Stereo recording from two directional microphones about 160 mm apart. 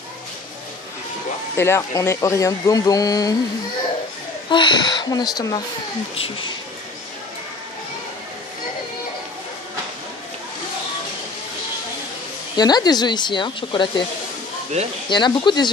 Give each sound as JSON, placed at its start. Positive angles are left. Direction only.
{"t": 1.6, "sound": "speech", "side_deg": 15}
{"t": 4.5, "sound": "speech", "side_deg": 30}
{"t": 12.5, "sound": "speech", "side_deg": 25}
{"t": 15.0, "sound": "speech", "side_deg": 30}